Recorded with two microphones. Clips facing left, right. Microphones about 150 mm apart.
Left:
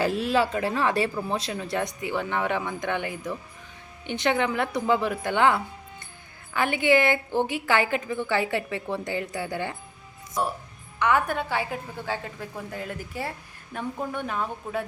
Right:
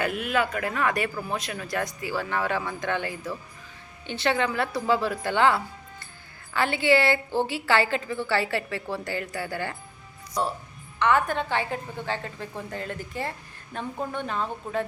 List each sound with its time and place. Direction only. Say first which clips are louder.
0.0 s a woman's voice: left 3 dB; 30° left (ahead or behind)
11.0 s a woman's voice: right 1 dB; 10° left (ahead or behind)